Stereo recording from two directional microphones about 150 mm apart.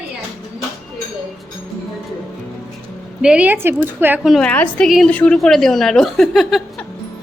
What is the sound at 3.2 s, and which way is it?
A woman's voice, 5° right (ahead or behind).